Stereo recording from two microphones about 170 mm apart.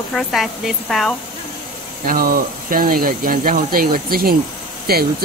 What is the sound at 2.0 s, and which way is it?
Speech, 55° right (ahead or behind).